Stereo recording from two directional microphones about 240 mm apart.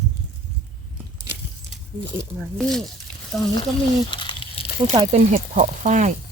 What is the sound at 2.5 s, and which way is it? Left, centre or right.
Speech, centre.